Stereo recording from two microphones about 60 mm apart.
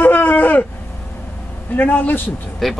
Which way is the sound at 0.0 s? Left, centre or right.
Left.